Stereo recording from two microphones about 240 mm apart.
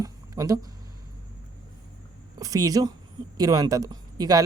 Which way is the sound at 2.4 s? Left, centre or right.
Centre.